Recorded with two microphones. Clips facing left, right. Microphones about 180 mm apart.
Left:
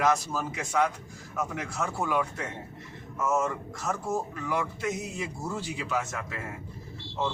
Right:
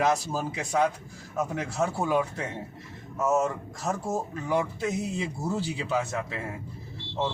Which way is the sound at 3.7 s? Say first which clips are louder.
Even; 35° right (ahead or behind).